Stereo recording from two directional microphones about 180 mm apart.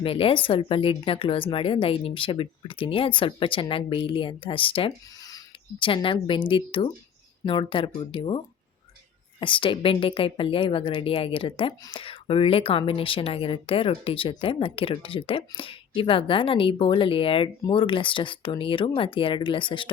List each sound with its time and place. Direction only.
0.0 s a woman's voice: 30° left (ahead or behind)
9.4 s a woman's voice: 30° left (ahead or behind)